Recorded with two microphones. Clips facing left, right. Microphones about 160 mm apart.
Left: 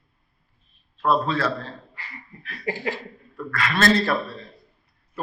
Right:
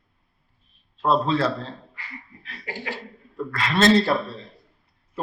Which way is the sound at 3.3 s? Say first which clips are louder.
Right 2 dB; 25° right (ahead or behind).